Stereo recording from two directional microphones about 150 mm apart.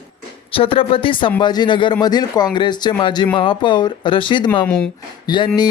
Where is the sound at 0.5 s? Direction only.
35° left (ahead or behind).